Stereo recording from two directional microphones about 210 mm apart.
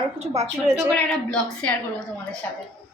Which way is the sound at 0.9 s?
5° left (ahead or behind).